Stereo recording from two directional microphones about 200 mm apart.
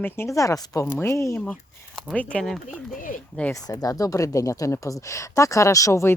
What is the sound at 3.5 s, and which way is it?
Speech, 20° left (ahead or behind).